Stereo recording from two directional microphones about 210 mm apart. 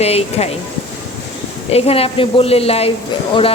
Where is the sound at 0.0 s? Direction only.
30° left (ahead or behind).